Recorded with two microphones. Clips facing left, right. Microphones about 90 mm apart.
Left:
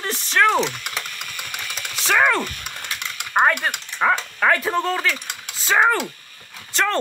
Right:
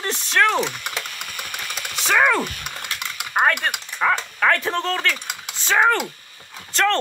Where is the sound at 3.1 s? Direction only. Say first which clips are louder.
Left 2 dB; centre (ahead or behind).